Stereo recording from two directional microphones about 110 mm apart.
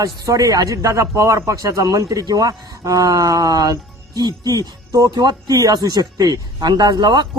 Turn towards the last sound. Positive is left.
turn(degrees=-40)  # may be behind; listen again after turning